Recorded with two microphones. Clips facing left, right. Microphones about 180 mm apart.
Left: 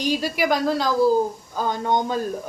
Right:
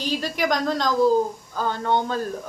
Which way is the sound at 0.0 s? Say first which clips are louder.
Left 2 dB; 10° left (ahead or behind).